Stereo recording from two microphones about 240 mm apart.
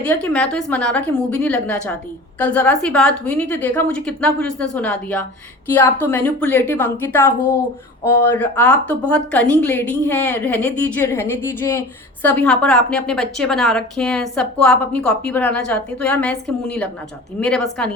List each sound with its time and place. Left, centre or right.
0.0 s a woman's voice: centre